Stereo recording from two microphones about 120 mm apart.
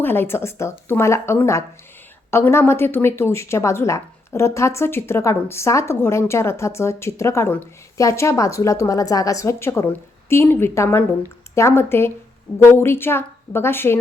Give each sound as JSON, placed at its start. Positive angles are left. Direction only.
{"t": 0.0, "sound": "speech", "side_deg": 20}